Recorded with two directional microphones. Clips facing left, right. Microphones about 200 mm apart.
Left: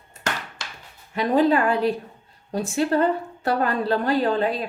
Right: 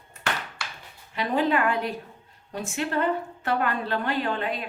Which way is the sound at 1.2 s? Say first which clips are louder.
Left 5 dB; 35° left (ahead or behind).